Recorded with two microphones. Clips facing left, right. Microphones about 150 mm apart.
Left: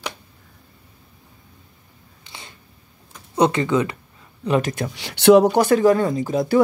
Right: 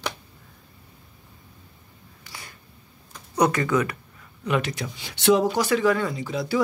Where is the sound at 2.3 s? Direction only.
25° left (ahead or behind).